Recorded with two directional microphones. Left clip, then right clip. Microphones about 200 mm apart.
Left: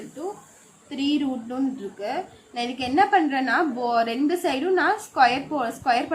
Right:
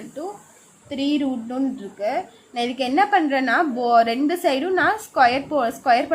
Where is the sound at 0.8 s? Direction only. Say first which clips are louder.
Right 2 dB; 30° right (ahead or behind).